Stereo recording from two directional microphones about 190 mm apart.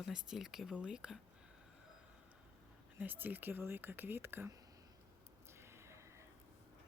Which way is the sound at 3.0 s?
10° right (ahead or behind).